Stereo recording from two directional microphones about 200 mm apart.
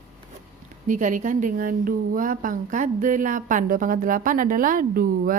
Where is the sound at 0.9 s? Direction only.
40° right (ahead or behind).